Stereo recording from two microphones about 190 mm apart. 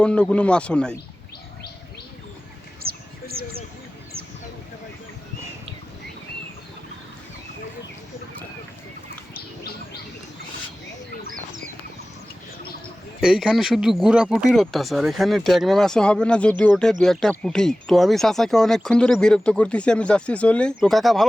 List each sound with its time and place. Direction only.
0.0 s speech: 5° left (ahead or behind)
2.8 s bird: 50° right (ahead or behind)
11.3 s a sound: 45° right (ahead or behind)
13.2 s speech: 5° right (ahead or behind)